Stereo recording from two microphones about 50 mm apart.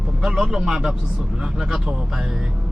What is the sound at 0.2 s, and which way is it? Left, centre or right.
Speech, centre.